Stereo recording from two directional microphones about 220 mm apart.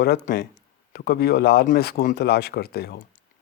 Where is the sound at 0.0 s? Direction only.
40° left (ahead or behind).